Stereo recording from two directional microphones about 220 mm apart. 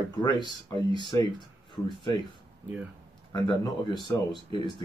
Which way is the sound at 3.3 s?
20° left (ahead or behind).